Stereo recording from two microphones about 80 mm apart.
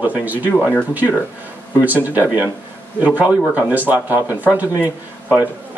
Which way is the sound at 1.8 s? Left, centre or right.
Right.